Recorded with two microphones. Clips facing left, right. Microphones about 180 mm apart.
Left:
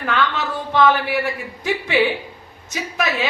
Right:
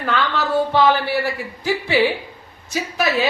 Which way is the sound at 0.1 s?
35° right (ahead or behind).